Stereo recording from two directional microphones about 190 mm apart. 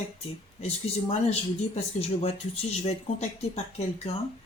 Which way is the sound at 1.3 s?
35° left (ahead or behind).